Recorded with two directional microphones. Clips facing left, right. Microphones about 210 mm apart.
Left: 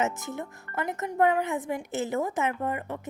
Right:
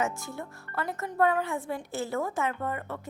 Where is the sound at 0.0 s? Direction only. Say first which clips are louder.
Left 2 dB; 20° left (ahead or behind).